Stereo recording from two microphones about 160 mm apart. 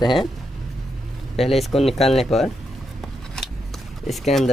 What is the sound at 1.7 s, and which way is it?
Speech, 35° left (ahead or behind).